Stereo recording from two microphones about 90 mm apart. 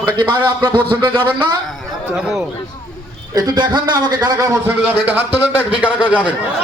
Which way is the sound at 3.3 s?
50° right (ahead or behind).